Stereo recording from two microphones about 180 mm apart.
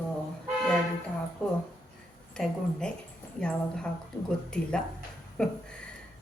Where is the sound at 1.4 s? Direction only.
5° left (ahead or behind).